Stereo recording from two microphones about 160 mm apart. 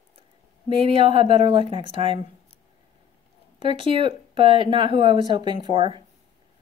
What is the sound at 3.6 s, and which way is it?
Speech, 35° right (ahead or behind).